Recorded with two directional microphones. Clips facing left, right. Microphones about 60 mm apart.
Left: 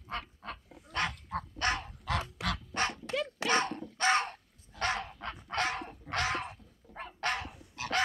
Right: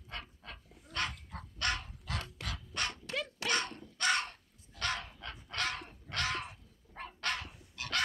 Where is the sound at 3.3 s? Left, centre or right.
Left.